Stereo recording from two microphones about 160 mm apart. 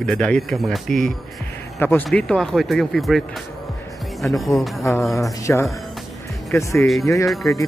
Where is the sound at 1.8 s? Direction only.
10° left (ahead or behind).